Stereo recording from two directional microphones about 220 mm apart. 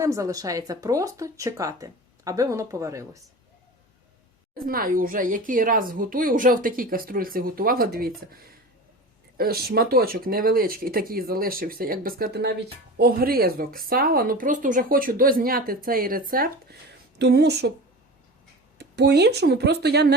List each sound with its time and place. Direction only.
0.0 s speech: 15° right (ahead or behind)
4.5 s speech: 40° right (ahead or behind)
18.8 s speech: 50° right (ahead or behind)